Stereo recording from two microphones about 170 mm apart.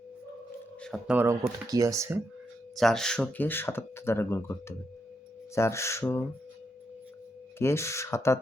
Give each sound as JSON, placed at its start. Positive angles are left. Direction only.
{"t": 1.0, "sound": "speech", "side_deg": -10}
{"t": 2.7, "sound": "speech", "side_deg": 0}
{"t": 5.5, "sound": "speech", "side_deg": 15}
{"t": 7.6, "sound": "speech", "side_deg": 15}